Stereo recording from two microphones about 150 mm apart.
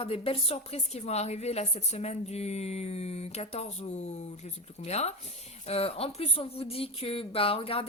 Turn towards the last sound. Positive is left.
turn(degrees=40)  # may be behind; listen again after turning